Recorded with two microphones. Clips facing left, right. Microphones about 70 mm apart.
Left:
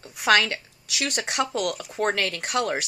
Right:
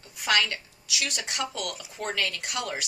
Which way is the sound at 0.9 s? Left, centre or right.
Left.